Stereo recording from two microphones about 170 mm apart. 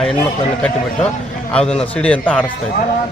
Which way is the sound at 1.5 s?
5° left (ahead or behind).